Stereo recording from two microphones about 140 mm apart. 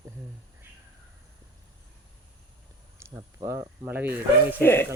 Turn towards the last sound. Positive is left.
turn(degrees=15)  # may be behind; listen again after turning